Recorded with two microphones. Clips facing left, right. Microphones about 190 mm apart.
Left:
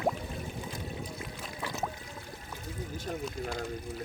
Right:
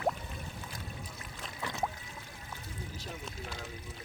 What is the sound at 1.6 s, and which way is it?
Boat, 5° left (ahead or behind).